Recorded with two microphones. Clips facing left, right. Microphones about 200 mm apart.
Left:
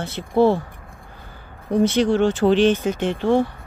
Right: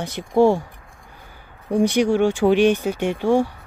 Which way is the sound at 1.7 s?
10° right (ahead or behind).